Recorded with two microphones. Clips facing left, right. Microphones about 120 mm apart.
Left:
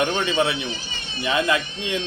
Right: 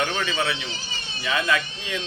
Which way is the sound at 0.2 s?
25° left (ahead or behind).